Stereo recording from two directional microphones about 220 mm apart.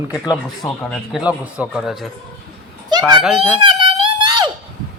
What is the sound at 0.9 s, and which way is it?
A man's voice, 5° right (ahead or behind).